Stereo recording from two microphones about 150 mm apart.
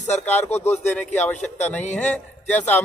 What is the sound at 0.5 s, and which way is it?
Speech, 45° left (ahead or behind).